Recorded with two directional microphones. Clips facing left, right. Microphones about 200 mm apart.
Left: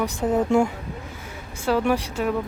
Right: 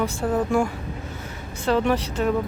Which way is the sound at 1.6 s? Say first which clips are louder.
Even; 10° left (ahead or behind).